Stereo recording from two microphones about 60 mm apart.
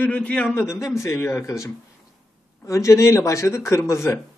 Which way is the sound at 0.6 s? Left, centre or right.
Left.